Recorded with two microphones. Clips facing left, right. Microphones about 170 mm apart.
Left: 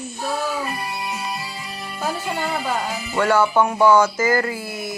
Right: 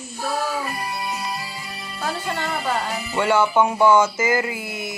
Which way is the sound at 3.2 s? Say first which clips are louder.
Left 1 dB; 20° right (ahead or behind).